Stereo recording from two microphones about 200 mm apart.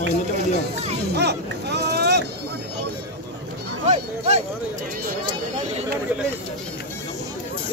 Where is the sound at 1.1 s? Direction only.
55° right (ahead or behind).